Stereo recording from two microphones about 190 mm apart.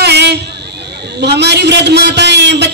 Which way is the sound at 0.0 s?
65° right (ahead or behind).